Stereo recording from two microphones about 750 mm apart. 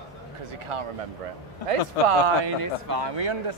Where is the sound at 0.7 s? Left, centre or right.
Right.